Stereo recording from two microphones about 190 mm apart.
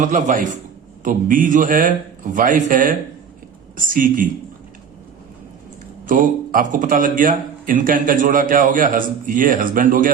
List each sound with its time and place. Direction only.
0.0 s speech: 40° right (ahead or behind)
6.1 s speech: 45° right (ahead or behind)